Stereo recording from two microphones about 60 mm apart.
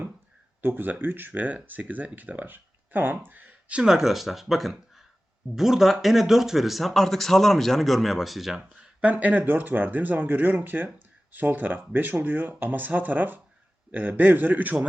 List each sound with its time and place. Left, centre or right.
0.6 s speech: right
9.1 s speech: right